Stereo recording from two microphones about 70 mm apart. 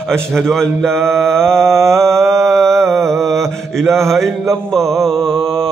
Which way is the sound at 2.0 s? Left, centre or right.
Right.